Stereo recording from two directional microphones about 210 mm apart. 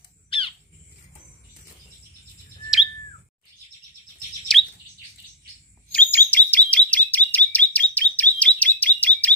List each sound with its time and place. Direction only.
0.3 s bird: 25° left (ahead or behind)
4.5 s bird: centre (ahead or behind)
5.9 s chirp: 5° left (ahead or behind)